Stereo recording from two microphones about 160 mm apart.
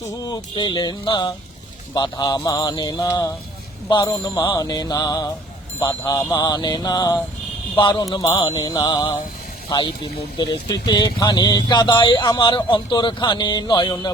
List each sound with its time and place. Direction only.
0.1 s speech: 25° left (ahead or behind)